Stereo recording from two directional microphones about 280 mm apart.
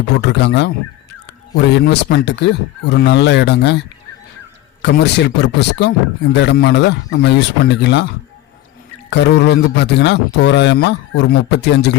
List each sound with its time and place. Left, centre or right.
0.2 s speech: left
4.8 s speech: left
9.0 s speech: left